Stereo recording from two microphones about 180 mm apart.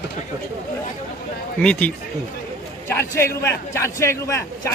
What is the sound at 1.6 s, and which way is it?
Speech, 5° left (ahead or behind).